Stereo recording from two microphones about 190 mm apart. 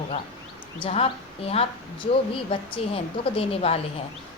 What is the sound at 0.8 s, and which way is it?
A woman's voice, 30° left (ahead or behind).